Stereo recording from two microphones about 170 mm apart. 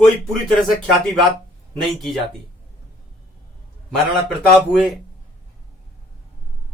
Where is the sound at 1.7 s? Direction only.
Centre (ahead or behind).